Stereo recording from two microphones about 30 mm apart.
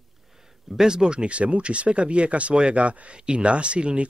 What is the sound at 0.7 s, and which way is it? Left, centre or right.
Speech, right.